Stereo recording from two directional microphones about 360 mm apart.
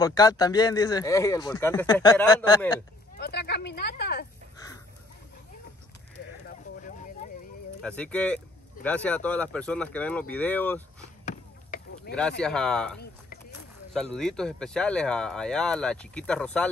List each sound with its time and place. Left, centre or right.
0.0 s speech: centre
3.2 s speech: left
6.4 s a sound: left
7.8 s speech: centre
11.2 s chop: left
12.2 s speech: centre